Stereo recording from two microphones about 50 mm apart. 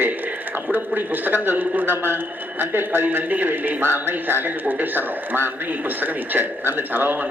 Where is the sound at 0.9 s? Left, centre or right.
Right.